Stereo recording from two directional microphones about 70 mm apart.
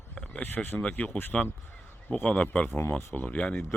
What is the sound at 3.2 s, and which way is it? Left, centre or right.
Speech, centre.